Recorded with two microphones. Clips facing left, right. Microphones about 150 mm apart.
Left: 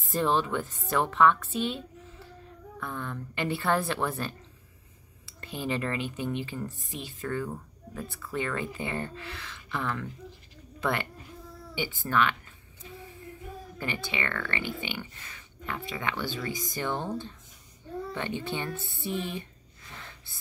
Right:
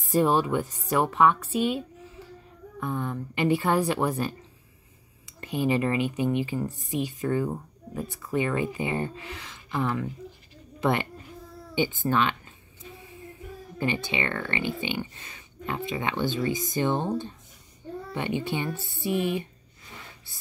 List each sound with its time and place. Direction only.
0.1 s speech: 10° right (ahead or behind)
2.8 s a woman's voice: 15° right (ahead or behind)
12.1 s speech: 25° right (ahead or behind)
13.7 s speech: 20° right (ahead or behind)